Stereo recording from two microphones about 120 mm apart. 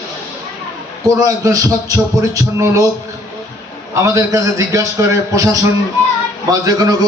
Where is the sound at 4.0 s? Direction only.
25° right (ahead or behind).